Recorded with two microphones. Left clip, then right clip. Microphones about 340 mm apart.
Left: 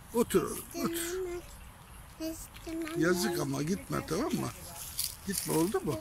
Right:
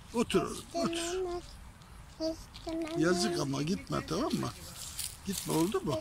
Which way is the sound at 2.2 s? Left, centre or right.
Centre.